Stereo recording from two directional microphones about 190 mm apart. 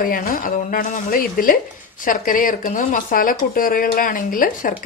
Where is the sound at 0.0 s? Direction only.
45° left (ahead or behind).